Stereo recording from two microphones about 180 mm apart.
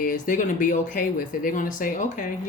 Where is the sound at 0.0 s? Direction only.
50° left (ahead or behind).